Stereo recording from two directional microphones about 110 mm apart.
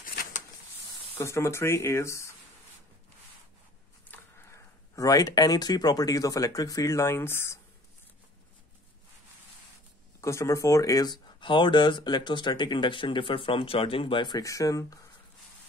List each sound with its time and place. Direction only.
1.1 s speech: 25° left (ahead or behind)
4.1 s speech: 25° left (ahead or behind)
10.2 s speech: 25° left (ahead or behind); by 14.4 s 45° left (ahead or behind)
14.4 s speech: 30° left (ahead or behind)